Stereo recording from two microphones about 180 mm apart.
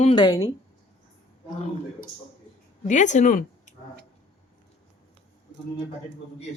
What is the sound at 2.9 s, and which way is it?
Speech, 40° left (ahead or behind).